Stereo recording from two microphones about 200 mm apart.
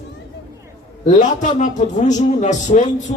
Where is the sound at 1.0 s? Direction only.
40° left (ahead or behind).